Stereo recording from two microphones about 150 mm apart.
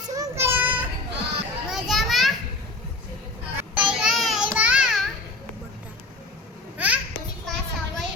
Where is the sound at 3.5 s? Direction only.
10° right (ahead or behind).